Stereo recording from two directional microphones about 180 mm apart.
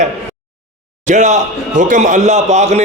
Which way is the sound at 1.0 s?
40° right (ahead or behind).